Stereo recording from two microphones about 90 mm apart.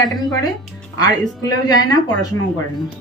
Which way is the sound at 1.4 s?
45° left (ahead or behind).